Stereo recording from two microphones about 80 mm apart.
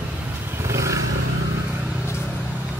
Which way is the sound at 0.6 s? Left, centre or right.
Right.